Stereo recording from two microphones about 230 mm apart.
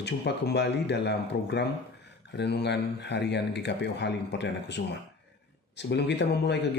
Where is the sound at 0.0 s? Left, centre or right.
Left.